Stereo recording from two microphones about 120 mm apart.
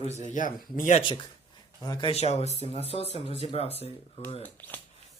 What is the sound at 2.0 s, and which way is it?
Speech, 60° left (ahead or behind).